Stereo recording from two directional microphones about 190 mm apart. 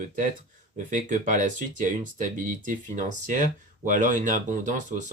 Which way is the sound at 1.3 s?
40° right (ahead or behind).